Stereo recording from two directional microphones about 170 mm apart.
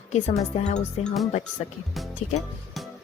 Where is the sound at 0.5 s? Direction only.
35° left (ahead or behind).